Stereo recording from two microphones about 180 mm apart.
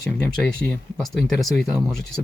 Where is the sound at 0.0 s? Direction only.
5° left (ahead or behind).